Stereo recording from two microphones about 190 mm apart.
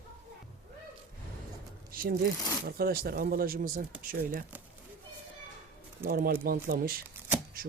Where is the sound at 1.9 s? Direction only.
50° right (ahead or behind).